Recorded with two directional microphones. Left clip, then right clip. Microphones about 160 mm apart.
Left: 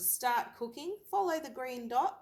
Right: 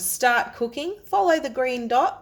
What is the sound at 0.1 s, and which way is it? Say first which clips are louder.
A woman's voice: right 12 dB; 45° right (ahead or behind).